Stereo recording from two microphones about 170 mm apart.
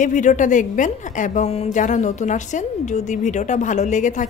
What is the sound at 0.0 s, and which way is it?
A woman's voice, 45° left (ahead or behind).